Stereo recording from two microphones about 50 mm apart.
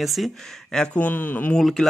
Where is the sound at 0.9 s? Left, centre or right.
Left.